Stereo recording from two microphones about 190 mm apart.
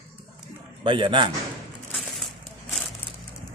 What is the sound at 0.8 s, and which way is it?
Speech, 25° right (ahead or behind).